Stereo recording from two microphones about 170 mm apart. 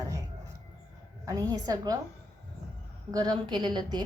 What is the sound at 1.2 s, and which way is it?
Speech, 20° right (ahead or behind).